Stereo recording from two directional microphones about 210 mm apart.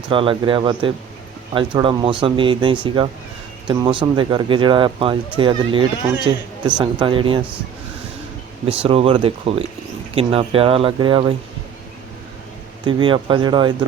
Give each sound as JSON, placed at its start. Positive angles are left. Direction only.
{"t": 0.1, "sound": "speech", "side_deg": -25}
{"t": 8.6, "sound": "speech", "side_deg": -25}
{"t": 12.8, "sound": "speech", "side_deg": -25}